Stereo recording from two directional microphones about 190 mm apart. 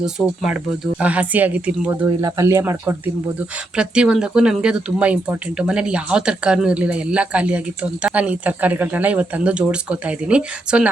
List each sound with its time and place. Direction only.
0.0 s speech: 5° right (ahead or behind)